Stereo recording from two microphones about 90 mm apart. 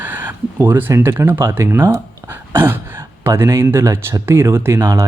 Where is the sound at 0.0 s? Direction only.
20° right (ahead or behind).